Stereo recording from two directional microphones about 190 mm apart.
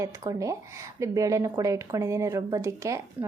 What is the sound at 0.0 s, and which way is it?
A woman's voice, 15° right (ahead or behind).